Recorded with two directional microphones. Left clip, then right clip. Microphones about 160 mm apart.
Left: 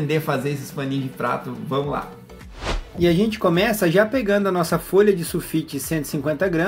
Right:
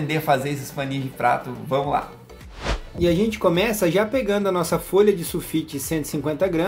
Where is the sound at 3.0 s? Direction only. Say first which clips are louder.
Left 1 dB; 5° left (ahead or behind).